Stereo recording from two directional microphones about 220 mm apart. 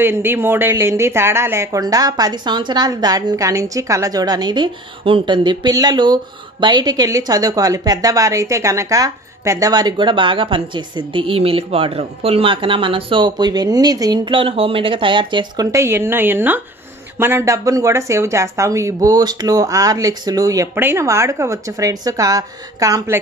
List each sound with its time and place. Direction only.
0.0 s speech: 10° right (ahead or behind)